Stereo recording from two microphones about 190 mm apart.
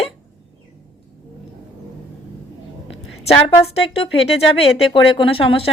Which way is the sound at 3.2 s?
30° left (ahead or behind).